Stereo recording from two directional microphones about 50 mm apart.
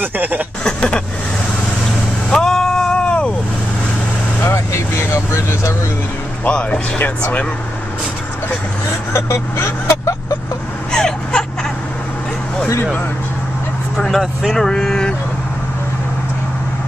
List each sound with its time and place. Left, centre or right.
0.0 s a sound: right
0.7 s vehicle: centre
2.2 s vehicle: centre
4.5 s speech: left
7.0 s speech: left
9.1 s speech: left
10.9 s vehicle: centre
13.9 s speech: centre